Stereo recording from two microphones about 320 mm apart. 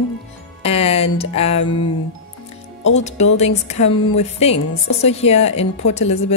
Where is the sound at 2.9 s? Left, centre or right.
Left.